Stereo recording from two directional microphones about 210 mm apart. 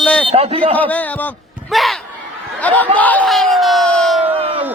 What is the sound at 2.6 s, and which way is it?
Speech, 5° left (ahead or behind).